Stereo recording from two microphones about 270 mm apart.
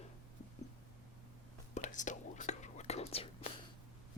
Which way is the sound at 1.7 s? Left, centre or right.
Left.